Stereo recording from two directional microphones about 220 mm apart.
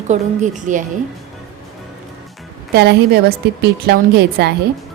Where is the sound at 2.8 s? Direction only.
45° right (ahead or behind).